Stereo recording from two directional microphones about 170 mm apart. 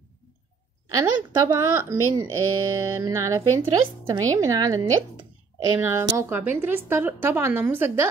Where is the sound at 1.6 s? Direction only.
15° right (ahead or behind).